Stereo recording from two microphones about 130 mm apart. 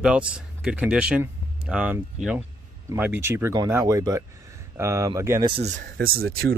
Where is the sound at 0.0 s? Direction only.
10° right (ahead or behind).